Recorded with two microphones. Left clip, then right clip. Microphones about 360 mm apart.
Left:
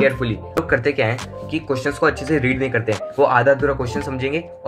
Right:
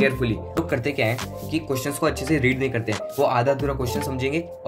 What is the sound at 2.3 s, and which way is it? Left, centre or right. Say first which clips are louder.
Speech: left 3 dB; centre.